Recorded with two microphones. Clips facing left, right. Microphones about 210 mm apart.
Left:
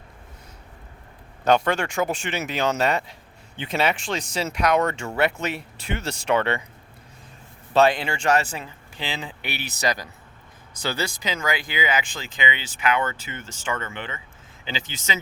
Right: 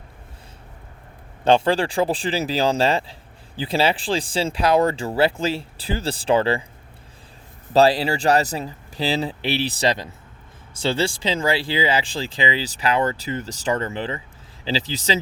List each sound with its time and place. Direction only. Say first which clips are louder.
1.5 s speech: right 3 dB; 30° right (ahead or behind)
7.7 s speech: right 3 dB; 35° right (ahead or behind)